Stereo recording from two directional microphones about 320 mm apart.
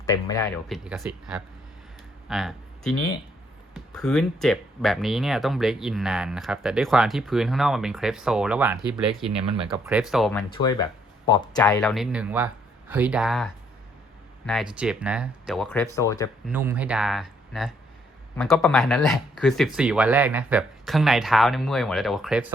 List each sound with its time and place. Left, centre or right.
0.0 s speech: centre
0.7 s speech: centre
2.2 s a sound: centre
3.8 s speech: centre
9.4 s speech: centre
9.8 s speech: centre
10.5 s speech: centre
16.5 s speech: centre